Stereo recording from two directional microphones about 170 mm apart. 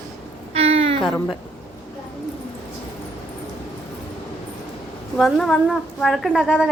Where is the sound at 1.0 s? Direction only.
5° left (ahead or behind).